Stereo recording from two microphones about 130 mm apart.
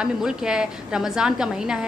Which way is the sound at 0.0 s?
5° right (ahead or behind).